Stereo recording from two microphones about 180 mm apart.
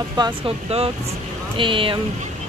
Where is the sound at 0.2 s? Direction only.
35° right (ahead or behind).